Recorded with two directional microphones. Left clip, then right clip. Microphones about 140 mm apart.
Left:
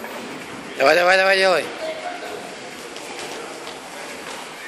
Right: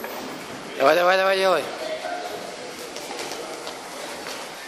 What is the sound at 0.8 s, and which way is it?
Speech, 15° right (ahead or behind).